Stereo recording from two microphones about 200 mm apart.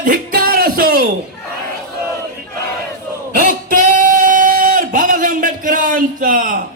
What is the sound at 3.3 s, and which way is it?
Singing, 40° right (ahead or behind).